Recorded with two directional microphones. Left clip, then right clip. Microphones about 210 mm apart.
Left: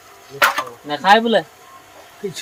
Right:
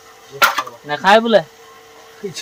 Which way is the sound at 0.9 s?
20° right (ahead or behind).